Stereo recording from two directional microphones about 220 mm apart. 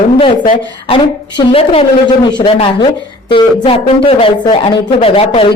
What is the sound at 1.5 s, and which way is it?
A woman's voice, 25° left (ahead or behind).